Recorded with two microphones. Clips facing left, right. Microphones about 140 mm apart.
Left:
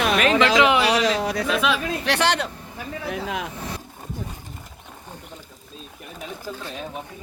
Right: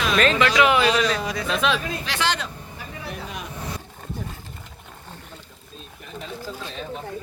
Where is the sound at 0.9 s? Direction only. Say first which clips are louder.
Left 1 dB; 85° left.